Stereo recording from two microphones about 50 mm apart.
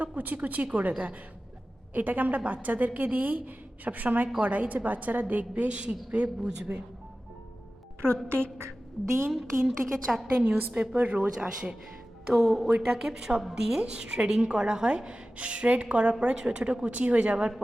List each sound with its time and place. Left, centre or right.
0.0 s a woman's voice: right
6.7 s speech: right
8.0 s speech: right
8.5 s a woman's voice: right
9.6 s a woman's voice: centre
10.3 s a woman's voice: right
11.3 s a woman's voice: centre
12.3 s a woman's voice: centre
12.9 s a woman's voice: centre